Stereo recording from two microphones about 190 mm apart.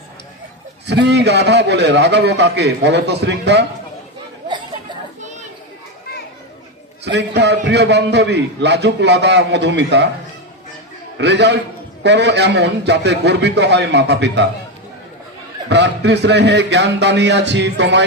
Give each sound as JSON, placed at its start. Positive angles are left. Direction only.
{"t": 0.9, "sound": "a man's voice", "side_deg": -65}
{"t": 7.0, "sound": "a man's voice", "side_deg": -65}
{"t": 11.2, "sound": "a man's voice", "side_deg": -65}
{"t": 15.7, "sound": "a man's voice", "side_deg": -65}